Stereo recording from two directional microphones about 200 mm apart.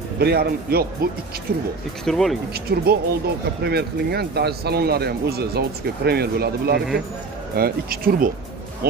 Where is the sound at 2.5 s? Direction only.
50° right (ahead or behind).